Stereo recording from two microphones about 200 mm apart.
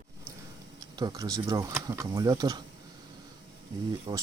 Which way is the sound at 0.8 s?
20° right (ahead or behind).